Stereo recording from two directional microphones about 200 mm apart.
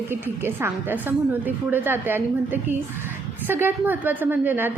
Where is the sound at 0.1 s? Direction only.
10° right (ahead or behind).